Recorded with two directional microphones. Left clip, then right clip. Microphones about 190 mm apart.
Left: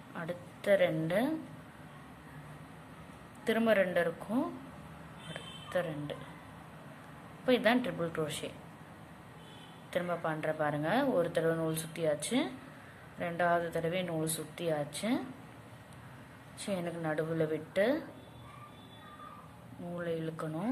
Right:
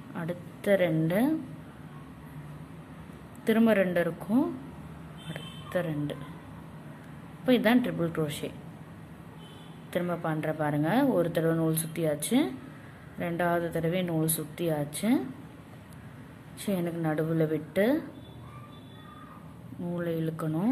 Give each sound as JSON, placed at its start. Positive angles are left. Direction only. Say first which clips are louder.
{"t": 0.1, "sound": "a woman's voice", "louder": "right 3 dB", "side_deg": -5}
{"t": 3.4, "sound": "speech", "louder": "right 4 dB", "side_deg": -10}
{"t": 5.3, "sound": "music", "louder": "right 3 dB", "side_deg": -10}
{"t": 7.4, "sound": "speech", "louder": "right 4 dB", "side_deg": -10}
{"t": 9.9, "sound": "speech", "louder": "right 3 dB", "side_deg": -10}
{"t": 16.6, "sound": "speech", "louder": "right 5 dB", "side_deg": -10}
{"t": 20.0, "sound": "speech", "louder": "right 4 dB", "side_deg": -10}